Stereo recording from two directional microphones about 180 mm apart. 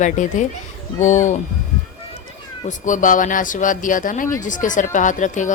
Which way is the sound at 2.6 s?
45° left (ahead or behind).